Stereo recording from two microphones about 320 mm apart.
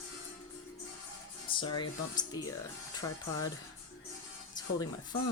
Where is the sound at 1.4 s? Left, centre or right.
Centre.